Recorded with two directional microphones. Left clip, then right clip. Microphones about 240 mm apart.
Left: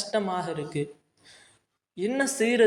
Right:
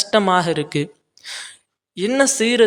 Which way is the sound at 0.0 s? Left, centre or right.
Right.